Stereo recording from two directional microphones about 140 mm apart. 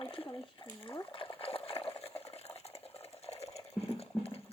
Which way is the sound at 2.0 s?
45° left (ahead or behind).